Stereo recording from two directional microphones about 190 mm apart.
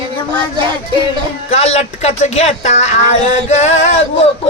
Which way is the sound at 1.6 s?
35° left (ahead or behind).